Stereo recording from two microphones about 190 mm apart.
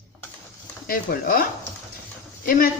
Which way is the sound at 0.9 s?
50° left (ahead or behind).